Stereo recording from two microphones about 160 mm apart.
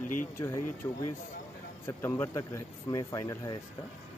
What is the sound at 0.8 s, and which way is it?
Speech, 20° left (ahead or behind).